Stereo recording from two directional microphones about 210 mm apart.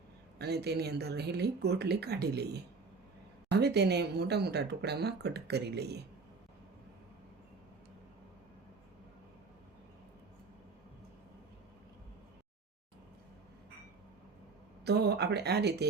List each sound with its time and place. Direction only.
0.3 s speech: 50° right (ahead or behind)
14.8 s speech: 50° right (ahead or behind)